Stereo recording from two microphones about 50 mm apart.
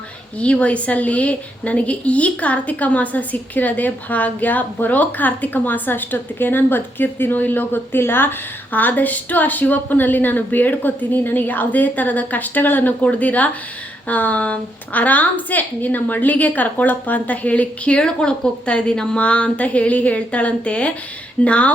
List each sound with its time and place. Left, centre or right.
0.3 s a woman's voice: left